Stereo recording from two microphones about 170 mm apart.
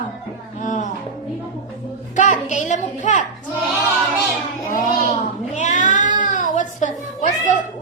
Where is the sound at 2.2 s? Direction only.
45° left (ahead or behind).